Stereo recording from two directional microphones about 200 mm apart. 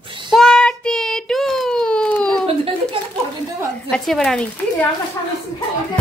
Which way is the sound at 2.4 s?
30° right (ahead or behind).